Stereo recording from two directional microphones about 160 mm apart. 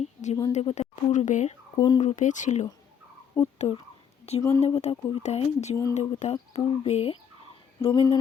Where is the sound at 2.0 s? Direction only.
50° left (ahead or behind).